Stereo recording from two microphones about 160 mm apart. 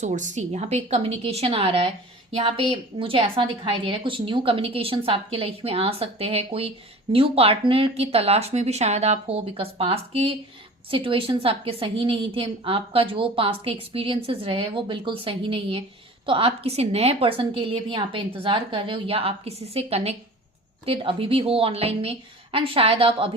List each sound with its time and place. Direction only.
0.0 s a woman's voice: 50° right (ahead or behind)